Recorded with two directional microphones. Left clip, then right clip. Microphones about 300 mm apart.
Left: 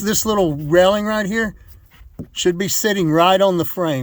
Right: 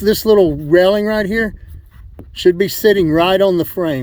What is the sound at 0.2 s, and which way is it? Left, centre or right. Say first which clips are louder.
Speech: right 7 dB; centre.